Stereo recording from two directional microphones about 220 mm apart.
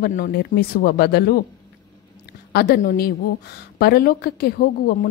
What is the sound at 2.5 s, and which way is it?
A woman's voice, 45° left (ahead or behind).